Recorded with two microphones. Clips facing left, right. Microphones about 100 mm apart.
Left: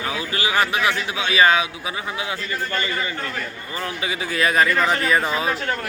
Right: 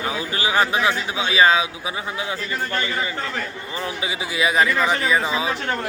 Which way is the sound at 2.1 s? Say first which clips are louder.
Even; 15° left (ahead or behind).